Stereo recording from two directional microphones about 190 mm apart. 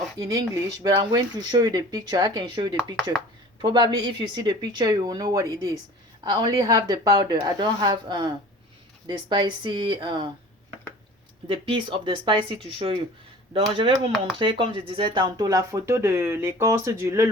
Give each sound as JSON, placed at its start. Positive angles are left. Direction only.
{"t": 0.2, "sound": "speech", "side_deg": -20}
{"t": 2.9, "sound": "speech", "side_deg": 0}
{"t": 3.6, "sound": "speech", "side_deg": -25}
{"t": 11.4, "sound": "speech", "side_deg": -25}